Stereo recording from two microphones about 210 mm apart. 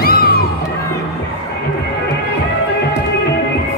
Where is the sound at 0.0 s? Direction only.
45° left (ahead or behind).